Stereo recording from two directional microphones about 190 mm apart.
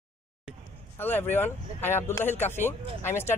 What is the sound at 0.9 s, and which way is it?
Speech, 10° left (ahead or behind).